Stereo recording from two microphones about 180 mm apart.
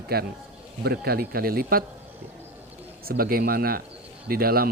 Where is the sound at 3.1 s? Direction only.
55° right (ahead or behind).